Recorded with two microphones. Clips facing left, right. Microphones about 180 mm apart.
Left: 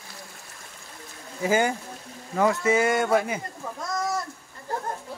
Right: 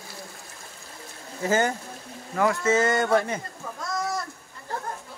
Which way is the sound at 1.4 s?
10° left (ahead or behind).